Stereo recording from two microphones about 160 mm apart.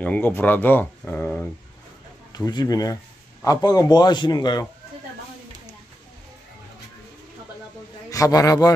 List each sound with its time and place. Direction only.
0.0 s speech: 10° left (ahead or behind)
2.3 s a man's voice: 25° left (ahead or behind)
8.1 s a man's voice: 20° left (ahead or behind)